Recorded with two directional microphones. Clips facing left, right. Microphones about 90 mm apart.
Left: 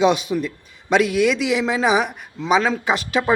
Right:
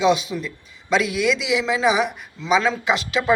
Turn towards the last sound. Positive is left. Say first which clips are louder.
# even
turn(degrees=45)  # may be behind; listen again after turning